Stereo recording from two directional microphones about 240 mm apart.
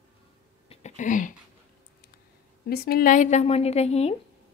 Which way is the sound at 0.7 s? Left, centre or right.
Left.